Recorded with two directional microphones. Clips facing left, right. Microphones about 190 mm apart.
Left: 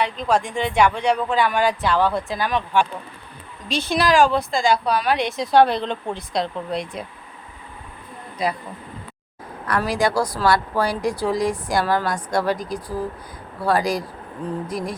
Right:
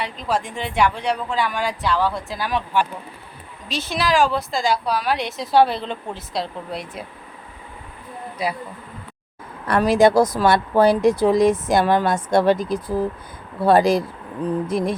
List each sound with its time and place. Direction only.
0.3 s a woman's voice: 5° right (ahead or behind)
1.4 s speech: 55° left (ahead or behind)
2.3 s a woman's voice: 5° right (ahead or behind)
8.4 s speech: 5° right (ahead or behind)
9.6 s a woman's voice: 25° right (ahead or behind)